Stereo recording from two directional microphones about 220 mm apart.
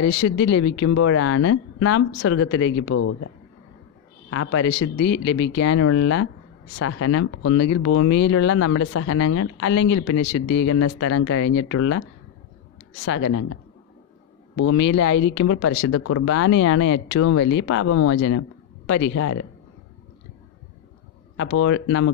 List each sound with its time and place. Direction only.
0.0 s speech: 65° left (ahead or behind); by 3.3 s 90° left
4.3 s speech: 65° left (ahead or behind); by 8.2 s 90° left
8.3 s speech: 80° left
13.0 s speech: 65° left (ahead or behind)
14.6 s speech: 65° left (ahead or behind); by 18.4 s 90° left
18.9 s speech: 60° left (ahead or behind); by 19.4 s 80° left
21.4 s speech: 60° left (ahead or behind)